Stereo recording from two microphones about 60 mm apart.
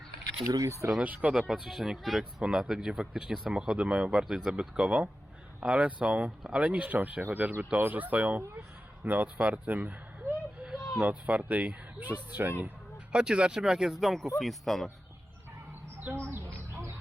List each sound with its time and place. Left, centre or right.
0.4 s speech: right
1.3 s speech: centre
2.4 s speech: centre
6.7 s speech: right
9.4 s a sound: right
11.0 s speech: right
13.1 s speech: centre